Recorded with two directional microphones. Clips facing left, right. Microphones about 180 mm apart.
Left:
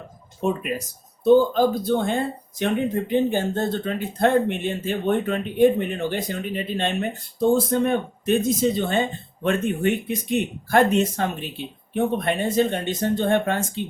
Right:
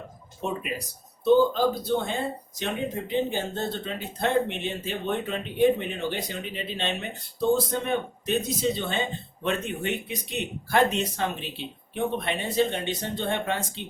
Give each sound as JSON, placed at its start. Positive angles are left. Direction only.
{"t": 1.2, "sound": "speech", "side_deg": 50}